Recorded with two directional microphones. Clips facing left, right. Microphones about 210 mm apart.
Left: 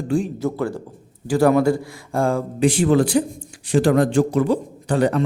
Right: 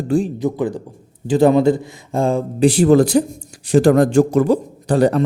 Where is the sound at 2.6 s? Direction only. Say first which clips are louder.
Right 5 dB; 35° right (ahead or behind).